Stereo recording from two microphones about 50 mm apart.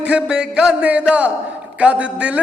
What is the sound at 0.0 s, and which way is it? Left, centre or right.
A man's voice, centre.